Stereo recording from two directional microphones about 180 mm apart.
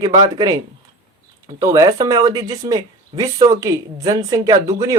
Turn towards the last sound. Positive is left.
turn(degrees=-20)  # may be behind; listen again after turning